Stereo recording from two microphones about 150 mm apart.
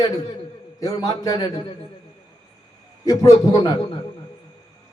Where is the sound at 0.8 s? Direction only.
25° left (ahead or behind).